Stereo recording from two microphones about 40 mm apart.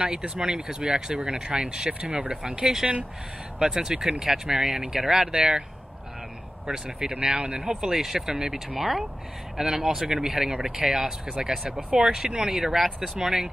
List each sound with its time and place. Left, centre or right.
0.0 s speech: right
6.7 s speech: centre
11.6 s speech: right
12.4 s speech: centre